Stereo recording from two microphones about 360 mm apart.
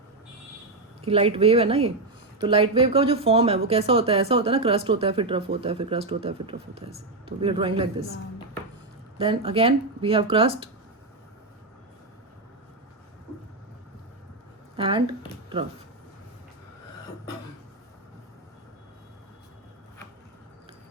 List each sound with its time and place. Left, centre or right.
1.0 s speech: centre
9.1 s speech: centre
14.8 s speech: centre